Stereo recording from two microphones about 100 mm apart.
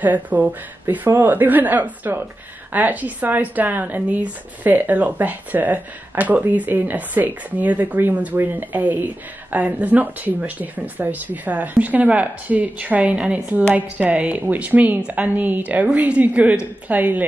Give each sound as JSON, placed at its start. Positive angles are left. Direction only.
{"t": 0.0, "sound": "speech", "side_deg": -15}